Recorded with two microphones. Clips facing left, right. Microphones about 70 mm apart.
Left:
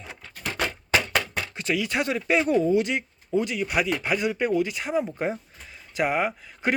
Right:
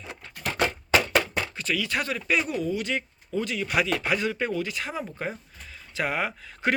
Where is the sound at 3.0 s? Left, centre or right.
Left.